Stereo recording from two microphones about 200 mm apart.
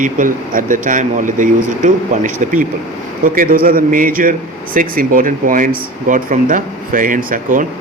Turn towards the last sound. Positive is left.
turn(degrees=-40)  # may be behind; listen again after turning